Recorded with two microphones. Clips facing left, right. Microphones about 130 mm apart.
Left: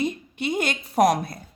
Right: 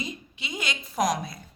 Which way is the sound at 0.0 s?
55° left (ahead or behind).